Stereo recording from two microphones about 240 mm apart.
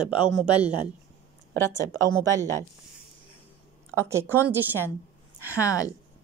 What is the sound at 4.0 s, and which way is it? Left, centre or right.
Speech, centre.